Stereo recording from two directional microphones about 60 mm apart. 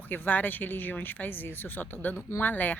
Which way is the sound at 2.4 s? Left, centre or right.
Left.